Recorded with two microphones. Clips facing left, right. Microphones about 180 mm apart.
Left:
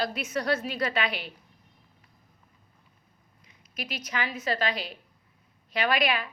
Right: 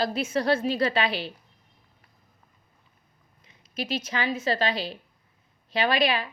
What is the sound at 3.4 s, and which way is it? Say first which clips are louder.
A woman's voice: right 6 dB; 25° right (ahead or behind).